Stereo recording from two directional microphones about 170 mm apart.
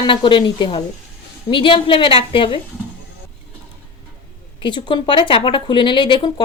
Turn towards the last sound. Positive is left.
turn(degrees=30)  # may be behind; listen again after turning